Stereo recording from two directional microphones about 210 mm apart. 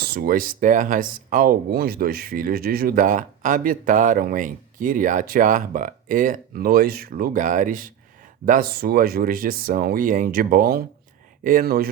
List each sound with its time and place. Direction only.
0.0 s speech: 45° right (ahead or behind)